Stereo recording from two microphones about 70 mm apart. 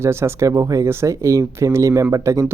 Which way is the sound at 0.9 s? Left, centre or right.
Right.